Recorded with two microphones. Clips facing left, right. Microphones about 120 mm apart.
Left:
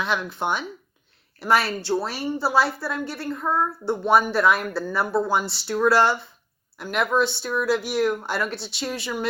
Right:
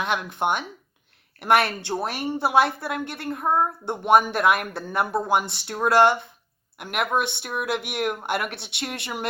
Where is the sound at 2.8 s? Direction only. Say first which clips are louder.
Even; 60° right (ahead or behind).